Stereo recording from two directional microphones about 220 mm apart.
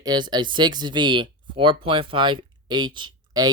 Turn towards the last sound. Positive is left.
turn(degrees=-20)  # may be behind; listen again after turning